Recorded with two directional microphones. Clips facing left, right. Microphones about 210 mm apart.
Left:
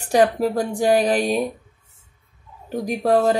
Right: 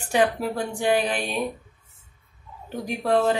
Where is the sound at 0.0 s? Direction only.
40° left (ahead or behind).